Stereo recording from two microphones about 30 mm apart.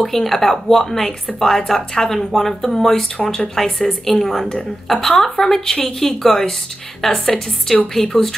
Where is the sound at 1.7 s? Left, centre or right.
Left.